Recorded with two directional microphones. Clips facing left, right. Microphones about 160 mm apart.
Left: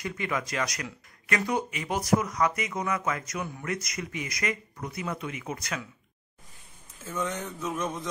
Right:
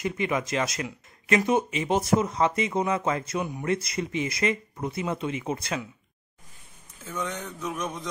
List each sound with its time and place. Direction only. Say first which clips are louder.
0.0 s speech: right 4 dB; 20° right (ahead or behind)
7.1 s speech: left 1 dB; 5° left (ahead or behind)